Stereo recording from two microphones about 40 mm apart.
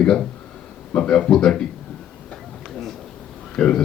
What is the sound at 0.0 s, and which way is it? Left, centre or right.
Speech, left.